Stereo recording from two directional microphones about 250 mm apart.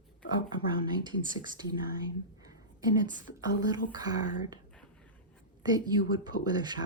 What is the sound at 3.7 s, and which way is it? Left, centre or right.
Speech, centre.